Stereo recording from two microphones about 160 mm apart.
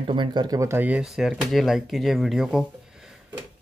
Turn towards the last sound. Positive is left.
turn(degrees=-5)  # may be behind; listen again after turning